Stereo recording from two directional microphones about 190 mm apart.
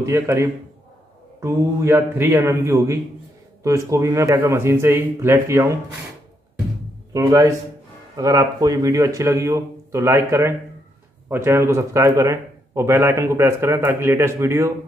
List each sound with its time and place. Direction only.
0.0 s a man's voice: 15° right (ahead or behind)
7.1 s a man's voice: 15° right (ahead or behind)